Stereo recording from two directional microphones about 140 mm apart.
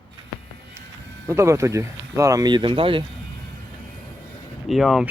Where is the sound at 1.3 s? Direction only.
20° right (ahead or behind); by 3.1 s 40° right (ahead or behind).